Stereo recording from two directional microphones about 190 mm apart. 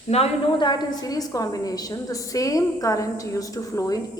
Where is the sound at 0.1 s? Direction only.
30° left (ahead or behind).